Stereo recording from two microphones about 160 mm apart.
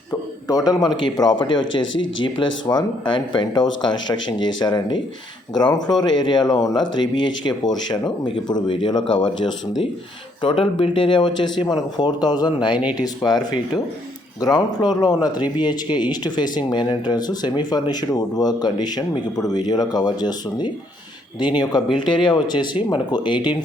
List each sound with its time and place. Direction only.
0.4 s speech: 25° left (ahead or behind)